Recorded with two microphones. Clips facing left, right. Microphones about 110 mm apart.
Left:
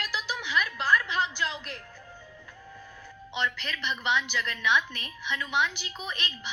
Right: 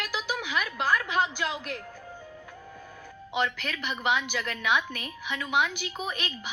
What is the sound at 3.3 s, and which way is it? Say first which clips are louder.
A woman's voice: right 3 dB; 45° right (ahead or behind).